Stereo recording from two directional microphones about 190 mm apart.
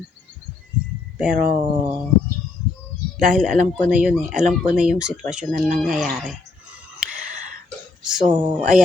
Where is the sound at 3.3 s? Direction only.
5° right (ahead or behind).